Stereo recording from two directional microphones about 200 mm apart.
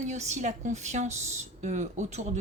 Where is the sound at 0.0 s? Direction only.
35° right (ahead or behind).